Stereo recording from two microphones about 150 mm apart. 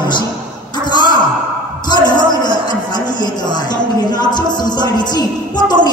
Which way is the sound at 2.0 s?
30° left (ahead or behind).